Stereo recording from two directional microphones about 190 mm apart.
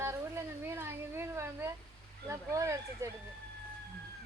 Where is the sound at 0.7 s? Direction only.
15° right (ahead or behind).